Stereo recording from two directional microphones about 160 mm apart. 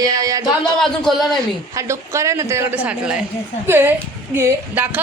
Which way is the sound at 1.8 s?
15° right (ahead or behind).